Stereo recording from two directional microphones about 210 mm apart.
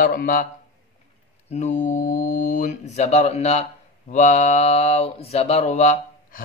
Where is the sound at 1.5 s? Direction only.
35° left (ahead or behind).